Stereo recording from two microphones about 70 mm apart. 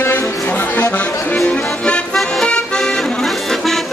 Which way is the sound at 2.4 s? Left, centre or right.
Centre.